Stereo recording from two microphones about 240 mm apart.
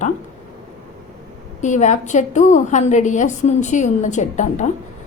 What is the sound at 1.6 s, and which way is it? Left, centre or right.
A woman's voice, left.